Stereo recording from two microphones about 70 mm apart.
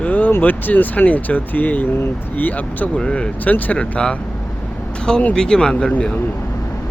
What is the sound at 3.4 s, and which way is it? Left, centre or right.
Speech, left.